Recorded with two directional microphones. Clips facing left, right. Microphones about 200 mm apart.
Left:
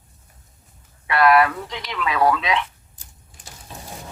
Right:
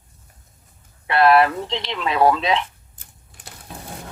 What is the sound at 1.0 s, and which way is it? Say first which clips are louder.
Speech: right 1 dB; 30° right (ahead or behind).